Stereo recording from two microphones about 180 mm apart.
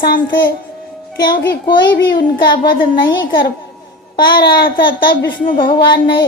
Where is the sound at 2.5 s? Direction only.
25° left (ahead or behind).